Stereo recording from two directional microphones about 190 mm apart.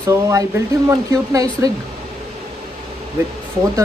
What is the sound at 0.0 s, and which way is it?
Speech, 15° right (ahead or behind).